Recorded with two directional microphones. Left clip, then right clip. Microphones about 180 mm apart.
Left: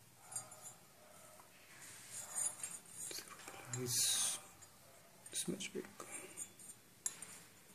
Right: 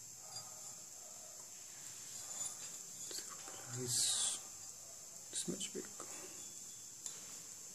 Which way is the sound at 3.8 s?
15° right (ahead or behind).